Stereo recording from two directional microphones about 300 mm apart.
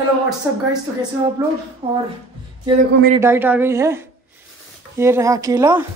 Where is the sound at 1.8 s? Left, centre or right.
Centre.